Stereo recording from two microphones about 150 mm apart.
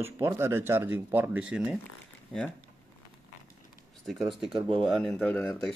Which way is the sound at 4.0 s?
Centre (ahead or behind).